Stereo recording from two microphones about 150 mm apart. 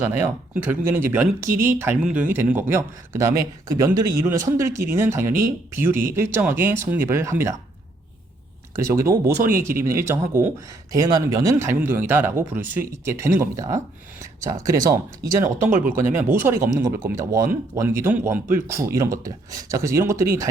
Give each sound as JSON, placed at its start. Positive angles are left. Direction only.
{"t": 0.0, "sound": "a man's voice", "side_deg": -10}
{"t": 8.7, "sound": "a man's voice", "side_deg": -20}